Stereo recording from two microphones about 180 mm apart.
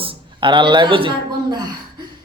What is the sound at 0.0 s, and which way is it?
Speech, 25° right (ahead or behind).